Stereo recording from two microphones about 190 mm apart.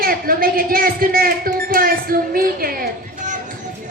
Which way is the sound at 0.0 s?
50° right (ahead or behind).